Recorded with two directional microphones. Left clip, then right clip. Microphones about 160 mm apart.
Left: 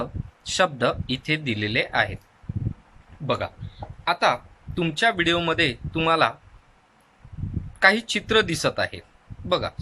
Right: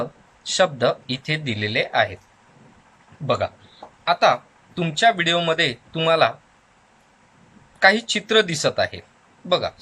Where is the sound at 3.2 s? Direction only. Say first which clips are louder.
Right 4 dB; 5° left (ahead or behind).